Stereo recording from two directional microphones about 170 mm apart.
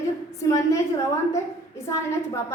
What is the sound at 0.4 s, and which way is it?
A woman's voice, 20° left (ahead or behind).